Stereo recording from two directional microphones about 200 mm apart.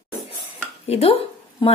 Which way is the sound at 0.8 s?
30° left (ahead or behind).